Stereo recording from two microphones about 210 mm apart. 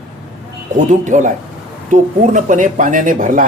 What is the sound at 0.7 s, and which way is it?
Speech, 35° right (ahead or behind).